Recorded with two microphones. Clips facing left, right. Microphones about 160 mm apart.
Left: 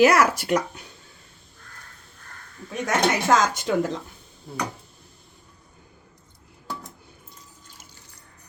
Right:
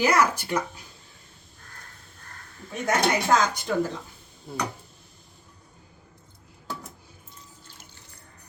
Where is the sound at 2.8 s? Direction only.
90° left.